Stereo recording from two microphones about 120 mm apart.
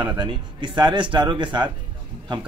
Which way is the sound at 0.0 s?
40° right (ahead or behind).